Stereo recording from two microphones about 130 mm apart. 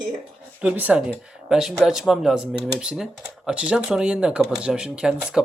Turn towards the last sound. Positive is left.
turn(degrees=-5)  # may be behind; listen again after turning